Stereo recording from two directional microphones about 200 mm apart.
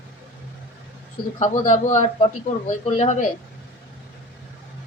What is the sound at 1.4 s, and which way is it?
A man's voice, 35° left (ahead or behind).